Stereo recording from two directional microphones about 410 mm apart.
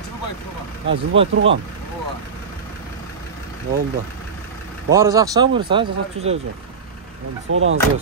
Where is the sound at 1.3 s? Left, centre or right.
Right.